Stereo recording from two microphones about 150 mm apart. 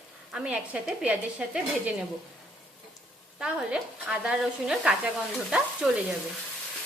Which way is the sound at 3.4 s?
5° right (ahead or behind).